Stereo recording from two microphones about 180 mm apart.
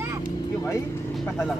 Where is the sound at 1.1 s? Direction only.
Centre (ahead or behind).